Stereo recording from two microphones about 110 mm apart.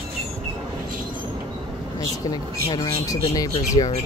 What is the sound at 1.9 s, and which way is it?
Speech, 35° left (ahead or behind).